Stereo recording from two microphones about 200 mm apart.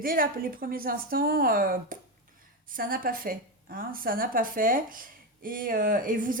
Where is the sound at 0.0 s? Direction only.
45° right (ahead or behind).